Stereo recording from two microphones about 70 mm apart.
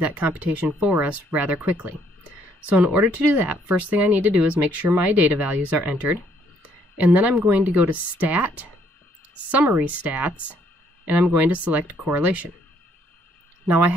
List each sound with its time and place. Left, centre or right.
0.0 s speech: right
9.8 s speech: right